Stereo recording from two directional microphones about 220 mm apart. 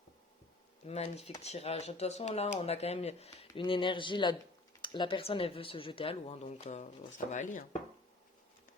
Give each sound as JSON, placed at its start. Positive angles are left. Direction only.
{"t": 0.9, "sound": "speech", "side_deg": 30}